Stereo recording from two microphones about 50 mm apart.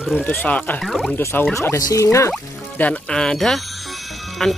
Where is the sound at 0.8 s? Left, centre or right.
Centre.